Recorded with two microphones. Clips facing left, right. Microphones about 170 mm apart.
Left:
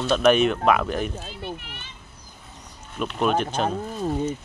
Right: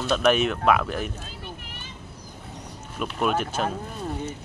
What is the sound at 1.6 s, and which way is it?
Children playing, 40° right (ahead or behind).